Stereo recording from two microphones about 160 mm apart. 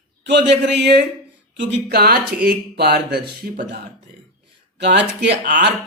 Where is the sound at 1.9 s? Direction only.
75° right (ahead or behind).